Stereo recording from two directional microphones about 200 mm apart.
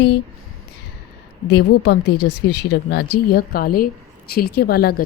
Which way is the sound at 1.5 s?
60° left (ahead or behind).